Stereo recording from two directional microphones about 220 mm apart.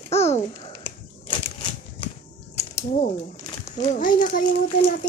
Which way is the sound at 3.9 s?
35° left (ahead or behind).